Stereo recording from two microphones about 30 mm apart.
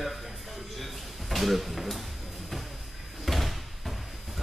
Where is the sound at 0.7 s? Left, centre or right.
Centre.